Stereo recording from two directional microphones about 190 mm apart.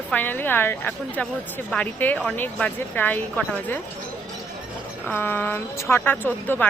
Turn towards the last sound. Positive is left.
turn(degrees=10)  # may be behind; listen again after turning